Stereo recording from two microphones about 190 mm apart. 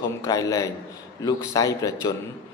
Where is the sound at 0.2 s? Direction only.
15° left (ahead or behind).